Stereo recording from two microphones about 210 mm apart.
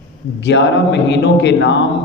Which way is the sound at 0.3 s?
55° left (ahead or behind).